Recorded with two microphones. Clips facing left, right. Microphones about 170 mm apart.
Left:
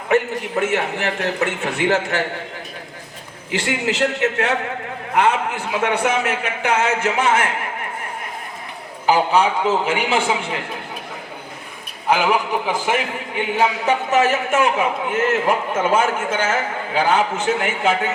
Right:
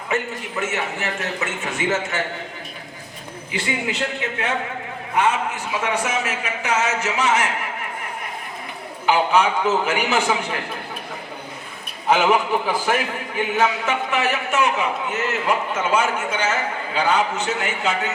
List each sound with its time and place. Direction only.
0.1 s a man's voice: 60° left (ahead or behind)
3.5 s a man's voice: 85° left
5.8 s a man's voice: 60° left (ahead or behind)
9.0 s a man's voice: 35° left (ahead or behind)
12.0 s a man's voice: 10° left (ahead or behind)
13.3 s a man's voice: 30° left (ahead or behind)
14.1 s a man's voice: 45° left (ahead or behind)